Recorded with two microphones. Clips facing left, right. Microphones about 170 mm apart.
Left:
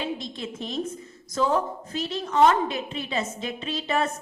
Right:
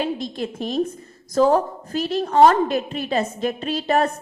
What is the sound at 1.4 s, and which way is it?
Speech, 40° right (ahead or behind).